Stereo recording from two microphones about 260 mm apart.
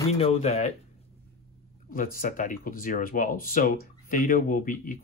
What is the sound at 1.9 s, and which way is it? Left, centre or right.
Speech, left.